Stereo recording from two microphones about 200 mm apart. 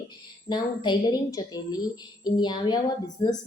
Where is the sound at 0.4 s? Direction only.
20° left (ahead or behind).